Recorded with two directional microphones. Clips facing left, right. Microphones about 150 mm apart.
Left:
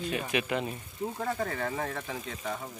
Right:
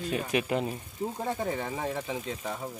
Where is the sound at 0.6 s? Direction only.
10° right (ahead or behind).